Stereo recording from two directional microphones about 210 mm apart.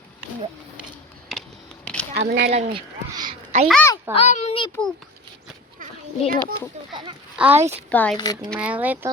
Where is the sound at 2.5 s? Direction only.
20° right (ahead or behind).